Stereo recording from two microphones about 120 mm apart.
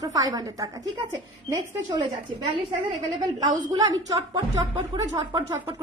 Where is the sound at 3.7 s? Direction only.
30° right (ahead or behind).